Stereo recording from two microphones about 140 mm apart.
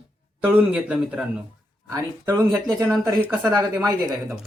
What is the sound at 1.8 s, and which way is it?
Speech, 20° right (ahead or behind).